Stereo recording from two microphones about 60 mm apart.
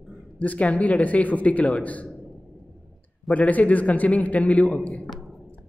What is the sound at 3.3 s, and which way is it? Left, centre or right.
Speech, left.